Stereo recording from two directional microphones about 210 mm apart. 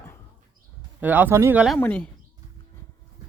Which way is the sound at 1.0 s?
10° right (ahead or behind).